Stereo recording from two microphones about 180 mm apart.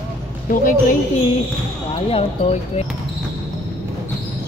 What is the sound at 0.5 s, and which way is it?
Speech, 50° left (ahead or behind).